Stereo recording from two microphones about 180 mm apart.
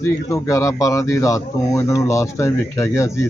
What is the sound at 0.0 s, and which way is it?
Speech, 15° left (ahead or behind).